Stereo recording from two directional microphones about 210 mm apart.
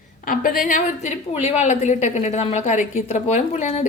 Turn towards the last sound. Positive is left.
turn(degrees=35)  # may be behind; listen again after turning